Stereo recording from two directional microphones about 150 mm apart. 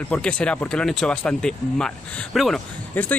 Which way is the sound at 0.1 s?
10° left (ahead or behind).